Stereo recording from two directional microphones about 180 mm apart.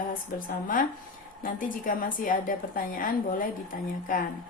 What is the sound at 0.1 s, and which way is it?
A woman's voice, 50° left (ahead or behind).